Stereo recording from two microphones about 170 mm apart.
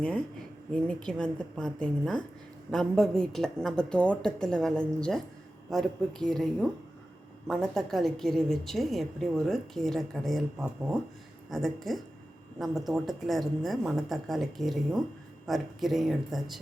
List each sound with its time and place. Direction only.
0.7 s a woman's voice: 5° left (ahead or behind)